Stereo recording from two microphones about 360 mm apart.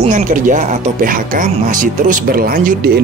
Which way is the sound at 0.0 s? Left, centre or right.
Right.